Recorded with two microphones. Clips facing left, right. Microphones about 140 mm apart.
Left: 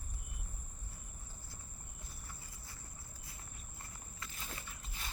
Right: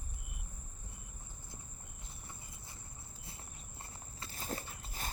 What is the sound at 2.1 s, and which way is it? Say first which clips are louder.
Clip-clop: right 2 dB; 25° right (ahead or behind).